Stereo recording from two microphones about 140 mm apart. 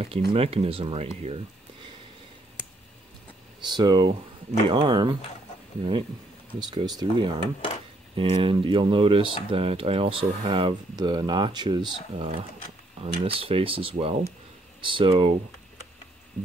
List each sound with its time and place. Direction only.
0.0 s speech: 45° right (ahead or behind)
3.6 s speech: 30° right (ahead or behind)